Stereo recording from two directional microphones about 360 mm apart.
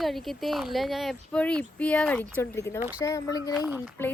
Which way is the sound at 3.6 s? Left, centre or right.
Centre.